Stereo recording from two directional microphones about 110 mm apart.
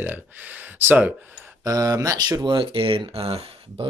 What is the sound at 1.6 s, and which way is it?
Speech, 35° right (ahead or behind).